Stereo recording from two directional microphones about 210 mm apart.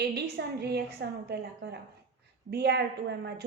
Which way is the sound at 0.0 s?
50° right (ahead or behind).